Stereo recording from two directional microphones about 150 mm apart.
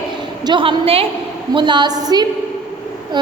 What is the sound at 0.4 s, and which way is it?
A woman's voice, 30° right (ahead or behind).